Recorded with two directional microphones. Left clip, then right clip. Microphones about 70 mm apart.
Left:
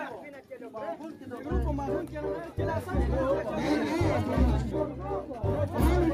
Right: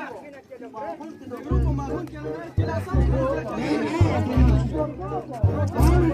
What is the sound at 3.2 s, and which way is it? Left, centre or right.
Chatter, centre.